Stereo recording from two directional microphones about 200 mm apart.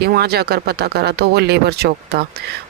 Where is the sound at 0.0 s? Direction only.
50° right (ahead or behind).